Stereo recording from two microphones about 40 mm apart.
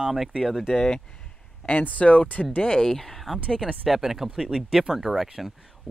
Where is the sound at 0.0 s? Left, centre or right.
Centre.